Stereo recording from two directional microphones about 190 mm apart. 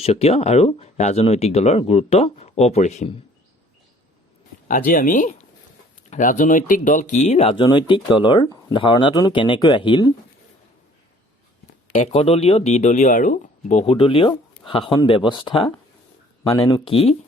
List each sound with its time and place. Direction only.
0.0 s speech: 35° left (ahead or behind)
4.9 s speech: 45° left (ahead or behind); by 10.1 s 25° left (ahead or behind)
11.9 s speech: 35° left (ahead or behind)